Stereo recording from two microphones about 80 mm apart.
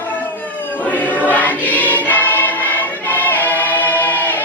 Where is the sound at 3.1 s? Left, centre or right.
Left.